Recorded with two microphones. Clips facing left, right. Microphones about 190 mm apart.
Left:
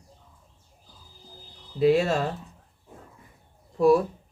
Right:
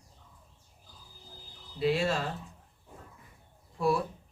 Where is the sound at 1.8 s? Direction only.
45° left (ahead or behind).